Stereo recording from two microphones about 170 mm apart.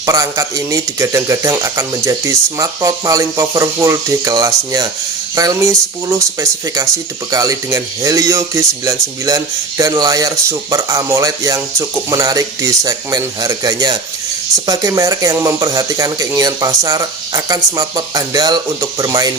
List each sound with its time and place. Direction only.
0.0 s speech: 20° right (ahead or behind)